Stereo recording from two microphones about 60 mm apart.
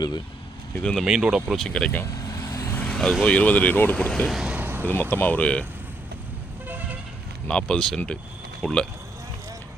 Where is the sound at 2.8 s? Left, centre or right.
Centre.